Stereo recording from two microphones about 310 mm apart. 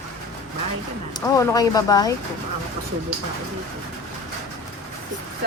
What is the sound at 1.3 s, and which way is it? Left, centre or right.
Speech, centre.